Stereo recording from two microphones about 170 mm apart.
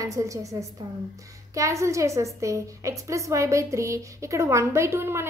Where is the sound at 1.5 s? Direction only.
20° right (ahead or behind).